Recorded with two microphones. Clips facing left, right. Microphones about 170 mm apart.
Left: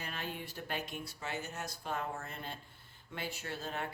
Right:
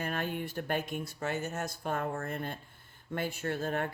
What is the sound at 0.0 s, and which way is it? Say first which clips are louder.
Speech: right 8 dB; 50° right (ahead or behind).